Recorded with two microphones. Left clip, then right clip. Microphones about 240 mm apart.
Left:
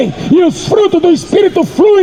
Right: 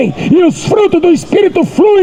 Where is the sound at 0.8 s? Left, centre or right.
Right.